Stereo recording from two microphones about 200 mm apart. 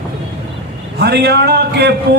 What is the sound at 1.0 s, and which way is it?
Speech, 55° right (ahead or behind).